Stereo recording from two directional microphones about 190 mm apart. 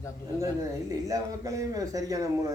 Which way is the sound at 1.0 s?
15° right (ahead or behind).